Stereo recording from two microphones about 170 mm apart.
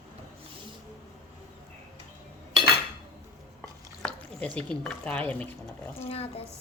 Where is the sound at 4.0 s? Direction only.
5° left (ahead or behind).